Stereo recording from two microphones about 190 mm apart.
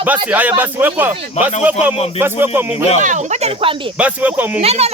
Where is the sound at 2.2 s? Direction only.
10° right (ahead or behind).